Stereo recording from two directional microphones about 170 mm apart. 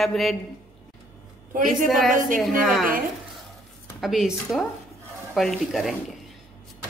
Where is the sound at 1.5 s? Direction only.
50° right (ahead or behind).